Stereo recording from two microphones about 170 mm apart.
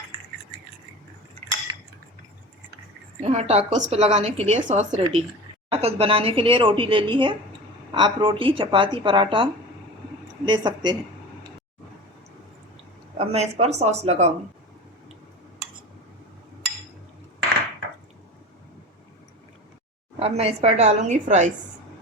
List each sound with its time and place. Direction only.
3.2 s a woman's voice: 40° right (ahead or behind)
13.1 s a woman's voice: 40° right (ahead or behind)
20.1 s a woman's voice: 35° right (ahead or behind)